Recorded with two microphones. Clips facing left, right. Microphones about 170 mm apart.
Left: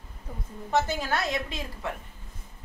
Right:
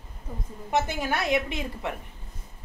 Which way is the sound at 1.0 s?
20° right (ahead or behind).